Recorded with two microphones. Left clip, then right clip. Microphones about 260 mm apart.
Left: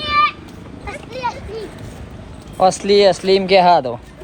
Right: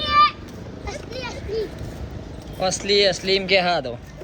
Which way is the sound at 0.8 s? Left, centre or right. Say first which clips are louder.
Left 8 dB; centre.